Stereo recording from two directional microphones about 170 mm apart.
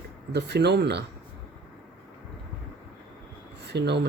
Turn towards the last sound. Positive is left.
turn(degrees=-80)